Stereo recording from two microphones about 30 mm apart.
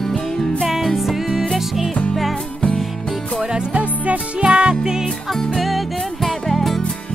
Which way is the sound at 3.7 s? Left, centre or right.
Right.